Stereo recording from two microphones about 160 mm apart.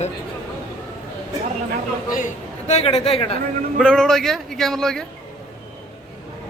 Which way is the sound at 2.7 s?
45° left (ahead or behind).